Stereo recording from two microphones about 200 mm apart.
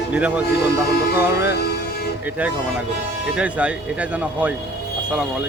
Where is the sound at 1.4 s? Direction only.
55° left (ahead or behind).